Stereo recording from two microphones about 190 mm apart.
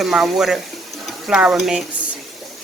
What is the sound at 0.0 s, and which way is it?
Speech, centre (ahead or behind).